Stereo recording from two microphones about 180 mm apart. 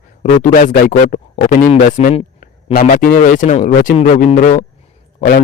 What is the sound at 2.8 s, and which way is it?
Speech, 50° left (ahead or behind).